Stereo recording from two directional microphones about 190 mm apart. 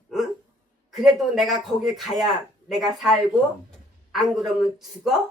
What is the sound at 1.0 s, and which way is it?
Speech, centre (ahead or behind).